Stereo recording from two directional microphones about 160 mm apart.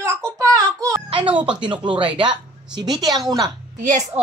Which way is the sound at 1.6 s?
30° right (ahead or behind).